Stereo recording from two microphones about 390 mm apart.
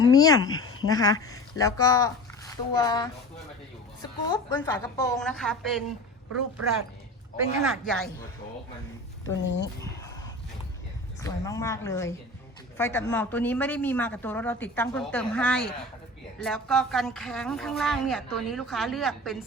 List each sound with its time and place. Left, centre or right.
0.0 s a woman's voice: centre
7.7 s speech: centre
9.2 s speech: left
11.2 s a woman's voice: centre